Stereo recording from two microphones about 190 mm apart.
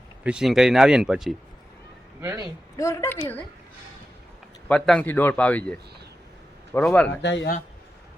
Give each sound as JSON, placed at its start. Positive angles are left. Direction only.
{"t": 0.2, "sound": "speech", "side_deg": -5}
{"t": 2.4, "sound": "a man's voice", "side_deg": 15}
{"t": 4.7, "sound": "a man's voice", "side_deg": 5}
{"t": 7.2, "sound": "speech", "side_deg": 70}